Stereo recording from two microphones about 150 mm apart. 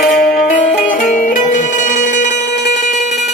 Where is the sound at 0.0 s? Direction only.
65° left (ahead or behind).